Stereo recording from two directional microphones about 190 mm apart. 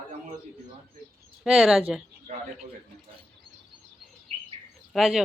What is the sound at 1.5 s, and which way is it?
Speech, 5° right (ahead or behind).